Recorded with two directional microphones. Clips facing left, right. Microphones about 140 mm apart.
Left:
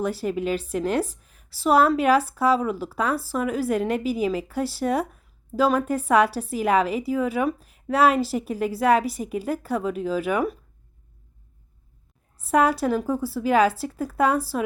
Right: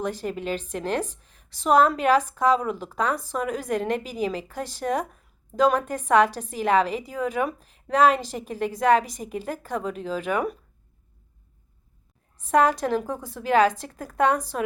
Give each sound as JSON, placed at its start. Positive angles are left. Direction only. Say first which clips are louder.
{"t": 0.0, "sound": "a woman's voice", "louder": "left 3 dB", "side_deg": 5}
{"t": 12.5, "sound": "a woman's voice", "louder": "even", "side_deg": 10}